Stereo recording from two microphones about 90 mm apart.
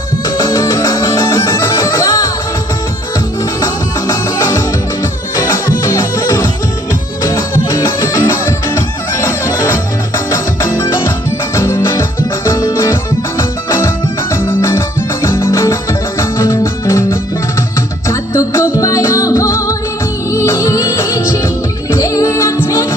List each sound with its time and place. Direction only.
0.5 s music: 30° left (ahead or behind)
3.6 s music: 40° left (ahead or behind)
5.6 s music: 40° left (ahead or behind)
10.2 s music: 30° left (ahead or behind)